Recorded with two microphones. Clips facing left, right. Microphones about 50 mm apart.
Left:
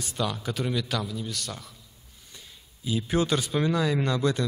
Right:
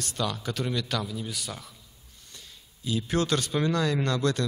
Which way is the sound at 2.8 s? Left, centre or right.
Centre.